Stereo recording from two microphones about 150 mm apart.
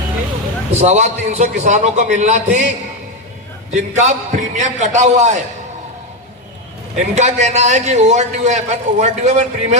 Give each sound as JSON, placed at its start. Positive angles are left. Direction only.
{"t": 0.7, "sound": "a man's voice", "side_deg": -50}
{"t": 3.7, "sound": "a man's voice", "side_deg": -50}
{"t": 6.9, "sound": "a man's voice", "side_deg": -50}